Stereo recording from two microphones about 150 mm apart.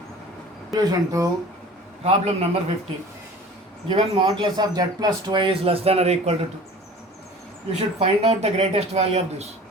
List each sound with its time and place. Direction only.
0.7 s speech: 25° right (ahead or behind)
2.0 s speech: 45° right (ahead or behind)
3.8 s speech: 35° right (ahead or behind)
7.7 s speech: 45° right (ahead or behind)